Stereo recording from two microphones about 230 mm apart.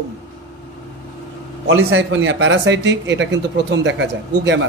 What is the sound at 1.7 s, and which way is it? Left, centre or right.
Speech, right.